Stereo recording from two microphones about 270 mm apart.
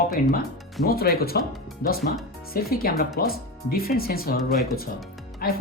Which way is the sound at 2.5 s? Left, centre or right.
Left.